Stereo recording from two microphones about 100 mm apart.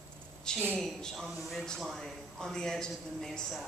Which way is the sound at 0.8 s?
5° left (ahead or behind).